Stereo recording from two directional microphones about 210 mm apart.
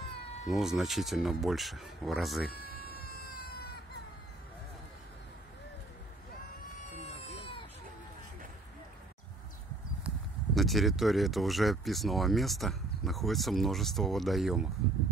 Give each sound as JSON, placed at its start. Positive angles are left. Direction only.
{"t": 0.5, "sound": "speech", "side_deg": 0}
{"t": 2.6, "sound": "music", "side_deg": 45}
{"t": 7.0, "sound": "baby cry", "side_deg": 30}
{"t": 10.0, "sound": "speech", "side_deg": 0}